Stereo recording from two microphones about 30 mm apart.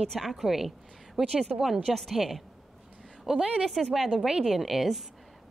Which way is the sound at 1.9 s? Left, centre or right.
Centre.